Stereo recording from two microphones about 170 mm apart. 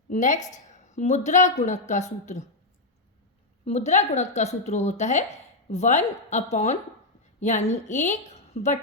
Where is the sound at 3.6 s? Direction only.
40° left (ahead or behind).